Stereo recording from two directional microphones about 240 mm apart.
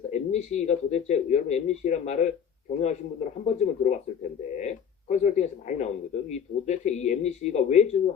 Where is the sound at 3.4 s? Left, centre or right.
Left.